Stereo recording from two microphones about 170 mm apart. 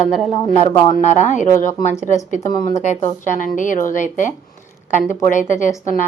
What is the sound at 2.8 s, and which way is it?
Speech, 45° left (ahead or behind).